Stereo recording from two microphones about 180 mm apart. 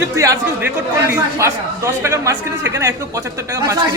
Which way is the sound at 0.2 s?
15° right (ahead or behind).